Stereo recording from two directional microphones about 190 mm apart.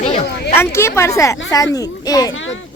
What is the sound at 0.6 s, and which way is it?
A child's voice, 15° left (ahead or behind).